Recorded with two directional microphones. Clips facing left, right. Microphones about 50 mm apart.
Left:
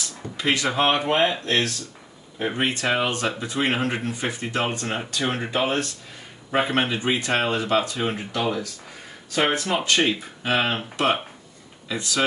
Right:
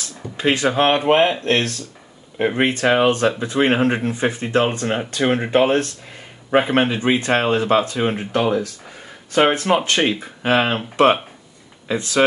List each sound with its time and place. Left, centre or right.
0.4 s speech: right
0.7 s speech: right